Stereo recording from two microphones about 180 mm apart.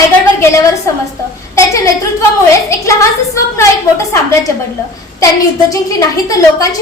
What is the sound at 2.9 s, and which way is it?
Speech, 15° left (ahead or behind).